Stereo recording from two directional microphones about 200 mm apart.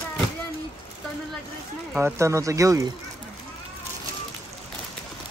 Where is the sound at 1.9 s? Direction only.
15° right (ahead or behind).